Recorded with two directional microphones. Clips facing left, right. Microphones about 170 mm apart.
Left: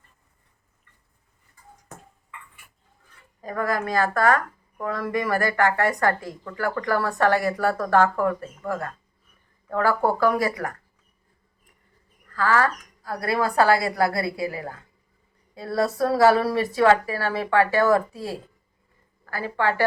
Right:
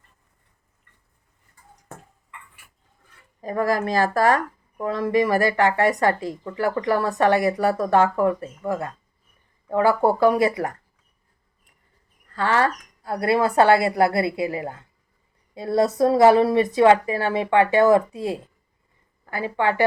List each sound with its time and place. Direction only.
3.4 s speech: 25° right (ahead or behind)
12.3 s a woman's voice: 25° right (ahead or behind)